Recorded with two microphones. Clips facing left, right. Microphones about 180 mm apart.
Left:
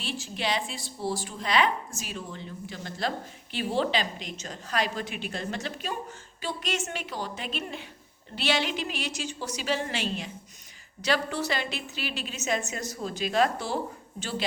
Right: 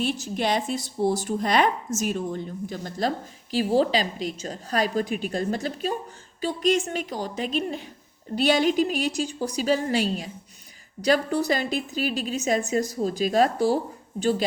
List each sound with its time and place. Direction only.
0.0 s a woman's voice: 45° right (ahead or behind)